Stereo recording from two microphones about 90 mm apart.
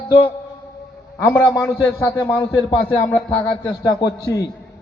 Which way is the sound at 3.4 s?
45° left (ahead or behind).